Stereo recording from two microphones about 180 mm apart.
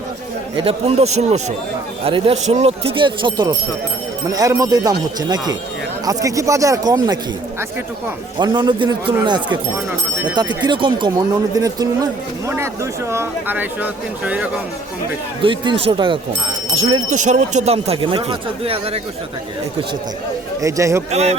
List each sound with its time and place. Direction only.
0.5 s speech: 30° right (ahead or behind)
8.4 s speech: 25° right (ahead or behind); by 14.5 s 10° right (ahead or behind)
15.4 s speech: 30° right (ahead or behind)
20.6 s speech: 15° right (ahead or behind)
21.1 s speech: 35° right (ahead or behind)